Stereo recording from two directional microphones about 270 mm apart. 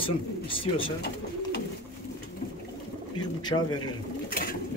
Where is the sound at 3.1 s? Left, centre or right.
Centre.